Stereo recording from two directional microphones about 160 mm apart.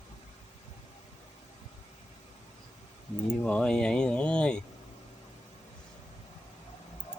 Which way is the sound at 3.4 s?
5° left (ahead or behind).